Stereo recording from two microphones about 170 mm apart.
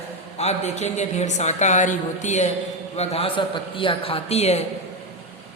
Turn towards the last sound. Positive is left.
turn(degrees=40)  # may be behind; listen again after turning